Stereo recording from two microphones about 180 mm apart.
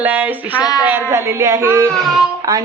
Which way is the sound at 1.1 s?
15° right (ahead or behind).